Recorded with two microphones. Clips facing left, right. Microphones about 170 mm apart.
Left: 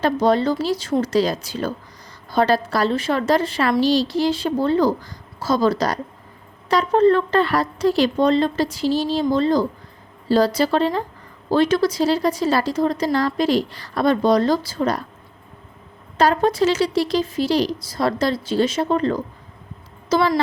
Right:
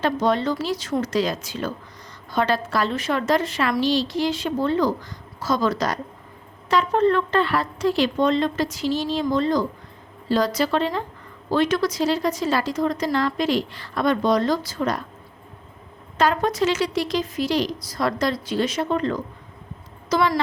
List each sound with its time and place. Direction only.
0.0 s a woman's voice: 35° left (ahead or behind)
16.1 s a woman's voice: 35° left (ahead or behind)